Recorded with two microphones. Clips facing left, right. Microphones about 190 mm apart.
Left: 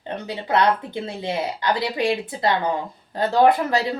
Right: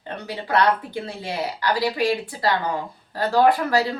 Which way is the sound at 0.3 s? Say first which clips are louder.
Even; 20° left (ahead or behind).